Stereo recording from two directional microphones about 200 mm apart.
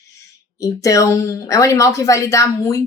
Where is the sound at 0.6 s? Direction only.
15° left (ahead or behind).